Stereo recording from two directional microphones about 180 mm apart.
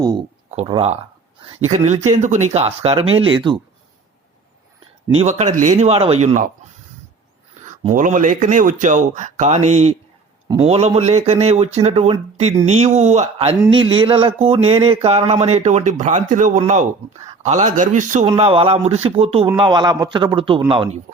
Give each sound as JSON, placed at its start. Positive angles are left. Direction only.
{"t": 0.5, "sound": "speech", "side_deg": -30}
{"t": 5.1, "sound": "speech", "side_deg": -40}
{"t": 7.9, "sound": "speech", "side_deg": -45}
{"t": 18.3, "sound": "a man's voice", "side_deg": -30}